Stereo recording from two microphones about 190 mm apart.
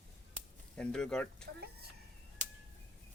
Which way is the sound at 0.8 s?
5° left (ahead or behind).